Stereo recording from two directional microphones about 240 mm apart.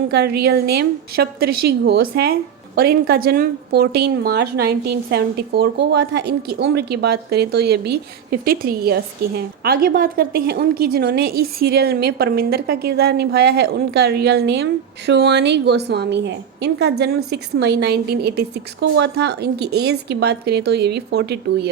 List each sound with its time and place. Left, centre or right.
0.1 s a woman's voice: right